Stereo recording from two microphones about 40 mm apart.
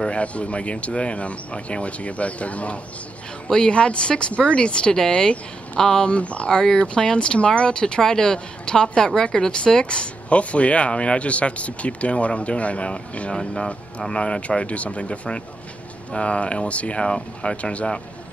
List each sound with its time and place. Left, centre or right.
0.0 s speech: left
3.4 s speech: centre
3.7 s speech: left
6.0 s speech: left
6.5 s speech: centre